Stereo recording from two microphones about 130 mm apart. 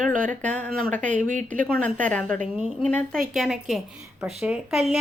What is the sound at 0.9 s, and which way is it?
Speech, 80° right.